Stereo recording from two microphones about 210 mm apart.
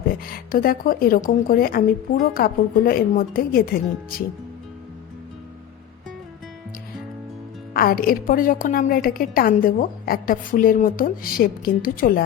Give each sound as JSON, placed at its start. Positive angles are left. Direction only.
{"t": 0.3, "sound": "a woman's voice", "side_deg": 45}
{"t": 7.7, "sound": "a woman's voice", "side_deg": 45}